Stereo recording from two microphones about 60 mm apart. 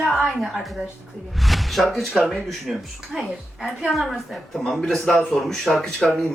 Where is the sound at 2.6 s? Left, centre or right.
Centre.